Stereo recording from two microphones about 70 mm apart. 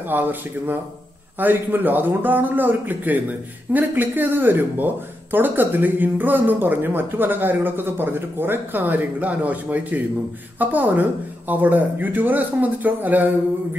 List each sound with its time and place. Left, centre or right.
0.1 s a man's voice: right